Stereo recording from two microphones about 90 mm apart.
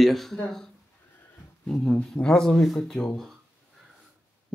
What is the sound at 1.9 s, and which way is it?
Speech, 10° left (ahead or behind).